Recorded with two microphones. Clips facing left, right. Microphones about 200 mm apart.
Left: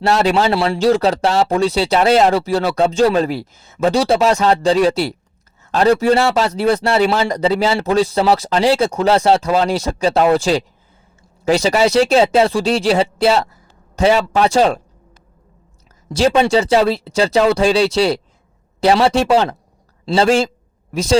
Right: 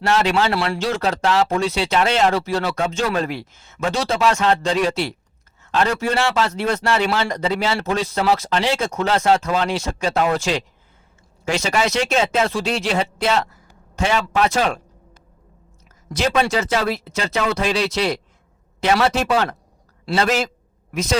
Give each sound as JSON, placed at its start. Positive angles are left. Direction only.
{"t": 0.0, "sound": "speech", "side_deg": 35}
{"t": 16.0, "sound": "speech", "side_deg": 30}